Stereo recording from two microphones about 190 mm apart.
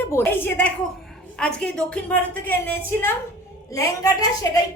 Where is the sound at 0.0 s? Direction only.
10° left (ahead or behind).